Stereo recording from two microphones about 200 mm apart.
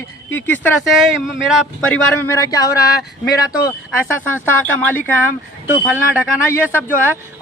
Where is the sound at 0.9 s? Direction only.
Centre (ahead or behind).